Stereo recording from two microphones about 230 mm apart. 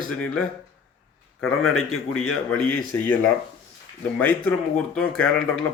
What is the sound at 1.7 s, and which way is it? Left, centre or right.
Speech, left.